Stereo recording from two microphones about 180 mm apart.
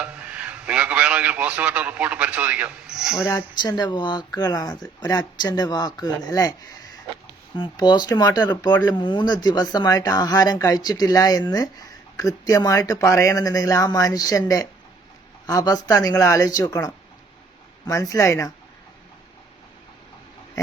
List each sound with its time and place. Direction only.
0.0 s a man's voice: 5° right (ahead or behind)
3.2 s speech: 20° left (ahead or behind)